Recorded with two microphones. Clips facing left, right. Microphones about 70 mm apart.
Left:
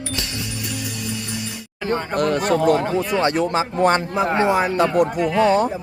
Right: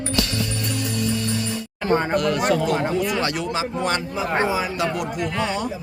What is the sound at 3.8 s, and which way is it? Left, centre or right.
Speech, left.